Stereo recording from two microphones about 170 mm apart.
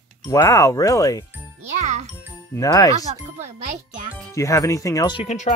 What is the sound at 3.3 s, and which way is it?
Speech, 45° right (ahead or behind).